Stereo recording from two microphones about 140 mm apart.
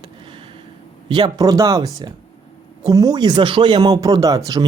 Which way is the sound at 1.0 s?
30° right (ahead or behind).